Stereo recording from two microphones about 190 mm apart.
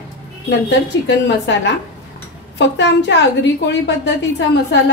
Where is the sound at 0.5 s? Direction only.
65° left (ahead or behind).